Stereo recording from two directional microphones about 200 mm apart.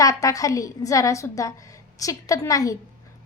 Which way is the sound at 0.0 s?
15° left (ahead or behind).